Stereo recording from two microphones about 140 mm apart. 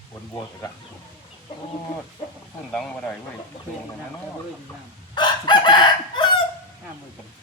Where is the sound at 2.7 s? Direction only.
5° left (ahead or behind).